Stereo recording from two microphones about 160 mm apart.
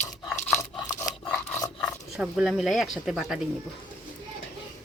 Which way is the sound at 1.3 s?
10° left (ahead or behind).